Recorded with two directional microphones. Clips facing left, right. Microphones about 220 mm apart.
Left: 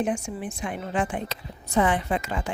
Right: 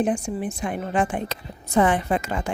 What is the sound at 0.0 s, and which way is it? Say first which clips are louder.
A woman's voice: right 4 dB; 35° right (ahead or behind).